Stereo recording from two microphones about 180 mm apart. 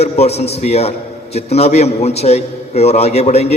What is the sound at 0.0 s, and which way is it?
A man's voice, 35° left (ahead or behind).